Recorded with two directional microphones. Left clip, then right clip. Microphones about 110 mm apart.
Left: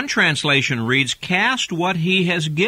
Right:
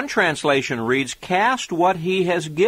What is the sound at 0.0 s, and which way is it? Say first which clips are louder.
Speech: left 1 dB; 5° left (ahead or behind).